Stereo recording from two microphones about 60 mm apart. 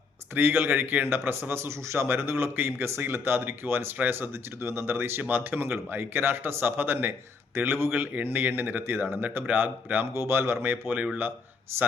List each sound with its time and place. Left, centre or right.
0.3 s a man's voice: right
10.2 s a man's voice: right